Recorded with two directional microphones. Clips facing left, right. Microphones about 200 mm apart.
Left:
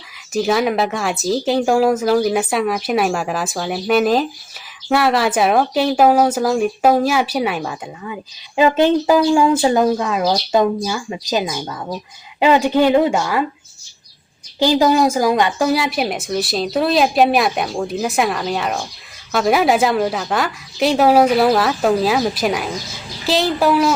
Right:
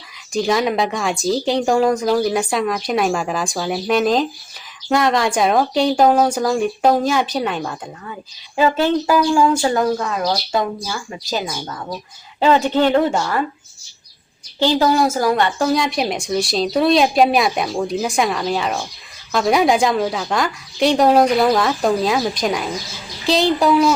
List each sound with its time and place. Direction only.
0.3 s a woman's voice: 5° left (ahead or behind)
14.6 s a woman's voice: 15° left (ahead or behind)